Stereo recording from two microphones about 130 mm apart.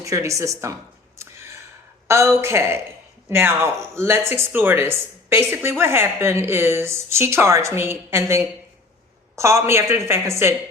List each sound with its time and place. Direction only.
0.0 s speech: 25° right (ahead or behind)
1.2 s a sound: 20° right (ahead or behind)
2.0 s speech: 20° right (ahead or behind)